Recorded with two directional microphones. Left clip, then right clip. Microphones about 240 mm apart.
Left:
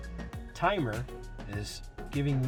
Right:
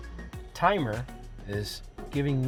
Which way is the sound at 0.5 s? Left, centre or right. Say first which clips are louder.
Right 4 dB; right.